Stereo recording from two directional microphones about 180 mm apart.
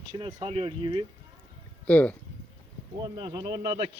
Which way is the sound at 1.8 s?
10° left (ahead or behind).